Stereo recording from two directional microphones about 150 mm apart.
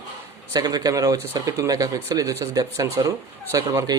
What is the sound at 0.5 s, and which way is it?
Speech, 25° right (ahead or behind).